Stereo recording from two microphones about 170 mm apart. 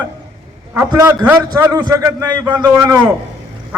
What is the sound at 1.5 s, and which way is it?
A man's voice, 15° right (ahead or behind).